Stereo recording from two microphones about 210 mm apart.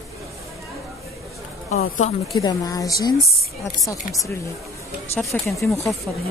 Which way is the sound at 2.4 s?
15° left (ahead or behind).